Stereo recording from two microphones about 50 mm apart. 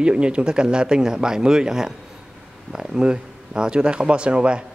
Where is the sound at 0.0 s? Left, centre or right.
Right.